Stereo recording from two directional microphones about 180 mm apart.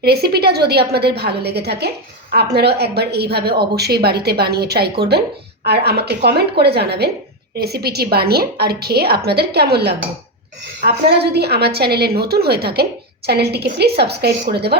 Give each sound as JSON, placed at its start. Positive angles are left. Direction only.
{"t": 0.0, "sound": "a woman's voice", "side_deg": -60}